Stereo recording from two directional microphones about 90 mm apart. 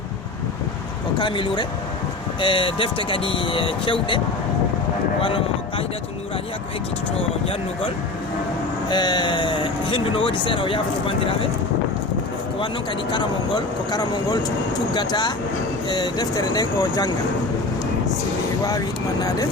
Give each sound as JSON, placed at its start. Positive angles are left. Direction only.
{"t": 1.2, "sound": "speech", "side_deg": 60}
{"t": 5.2, "sound": "a sound", "side_deg": 90}
{"t": 8.9, "sound": "speech", "side_deg": 50}
{"t": 13.9, "sound": "speech", "side_deg": 45}